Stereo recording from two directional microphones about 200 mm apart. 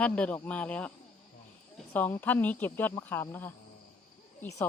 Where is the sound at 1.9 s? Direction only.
10° left (ahead or behind).